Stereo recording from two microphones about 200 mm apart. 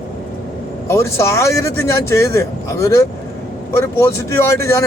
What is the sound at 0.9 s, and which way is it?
Speech, 15° left (ahead or behind).